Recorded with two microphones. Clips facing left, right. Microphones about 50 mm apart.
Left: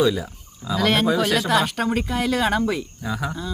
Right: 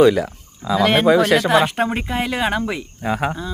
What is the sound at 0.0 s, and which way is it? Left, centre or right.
Speech, right.